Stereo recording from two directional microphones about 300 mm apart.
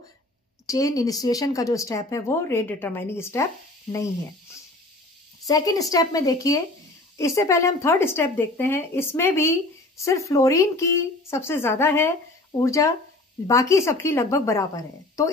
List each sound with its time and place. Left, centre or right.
0.7 s speech: centre
5.5 s speech: centre